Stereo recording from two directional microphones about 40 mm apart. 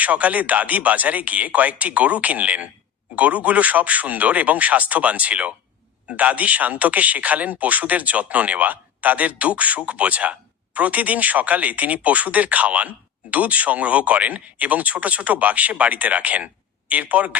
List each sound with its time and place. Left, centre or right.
0.0 s speech: right